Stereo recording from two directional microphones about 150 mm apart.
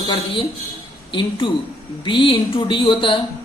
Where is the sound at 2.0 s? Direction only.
35° left (ahead or behind).